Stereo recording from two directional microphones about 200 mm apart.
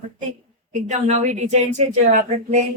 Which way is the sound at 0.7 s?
35° right (ahead or behind).